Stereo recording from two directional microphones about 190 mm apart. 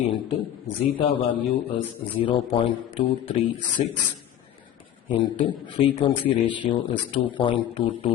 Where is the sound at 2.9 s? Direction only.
30° left (ahead or behind).